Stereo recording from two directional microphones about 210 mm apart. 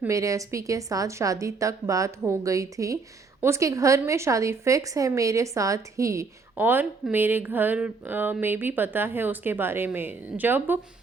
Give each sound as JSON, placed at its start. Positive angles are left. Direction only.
{"t": 0.0, "sound": "speech", "side_deg": -15}